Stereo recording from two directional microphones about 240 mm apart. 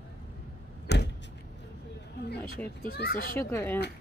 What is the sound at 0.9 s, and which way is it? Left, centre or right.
Vehicle, left.